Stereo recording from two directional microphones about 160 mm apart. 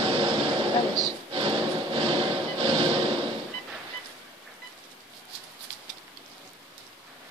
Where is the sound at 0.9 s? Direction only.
30° right (ahead or behind).